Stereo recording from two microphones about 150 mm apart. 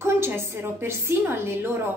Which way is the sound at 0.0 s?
15° right (ahead or behind).